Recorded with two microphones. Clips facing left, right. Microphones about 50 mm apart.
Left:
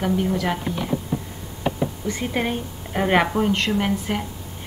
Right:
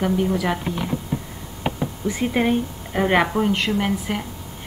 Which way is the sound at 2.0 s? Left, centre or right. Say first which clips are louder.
Right 6 dB; centre.